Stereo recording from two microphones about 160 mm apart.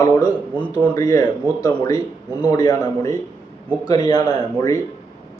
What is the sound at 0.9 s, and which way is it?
Speech, 20° left (ahead or behind).